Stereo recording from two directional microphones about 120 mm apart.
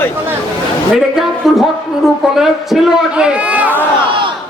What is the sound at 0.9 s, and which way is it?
A woman's voice, 5° right (ahead or behind).